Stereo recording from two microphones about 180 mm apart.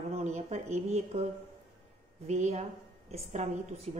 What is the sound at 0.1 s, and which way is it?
Speech, 40° right (ahead or behind).